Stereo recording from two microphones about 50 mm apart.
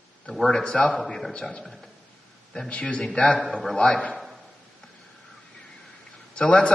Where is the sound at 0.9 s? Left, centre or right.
Centre.